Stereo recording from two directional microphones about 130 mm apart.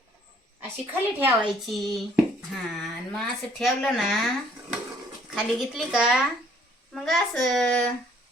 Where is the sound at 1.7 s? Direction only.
Centre (ahead or behind).